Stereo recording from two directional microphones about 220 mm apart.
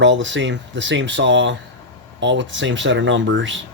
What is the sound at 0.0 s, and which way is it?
Speech, 55° right (ahead or behind).